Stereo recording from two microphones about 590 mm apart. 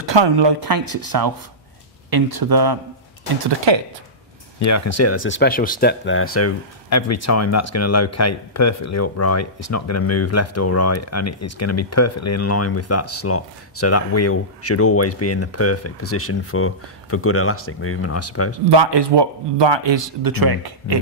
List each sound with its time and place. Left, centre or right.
0.0 s speech: right
3.4 s a man's voice: right
4.6 s speech: left
18.7 s a man's voice: right